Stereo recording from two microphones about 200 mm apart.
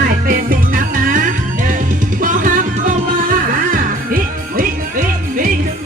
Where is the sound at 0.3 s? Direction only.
45° right (ahead or behind).